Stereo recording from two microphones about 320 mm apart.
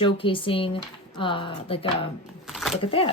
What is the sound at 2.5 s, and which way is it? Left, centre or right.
Speech, centre.